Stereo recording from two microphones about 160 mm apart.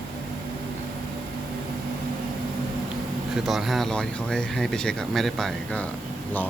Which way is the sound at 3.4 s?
Centre (ahead or behind).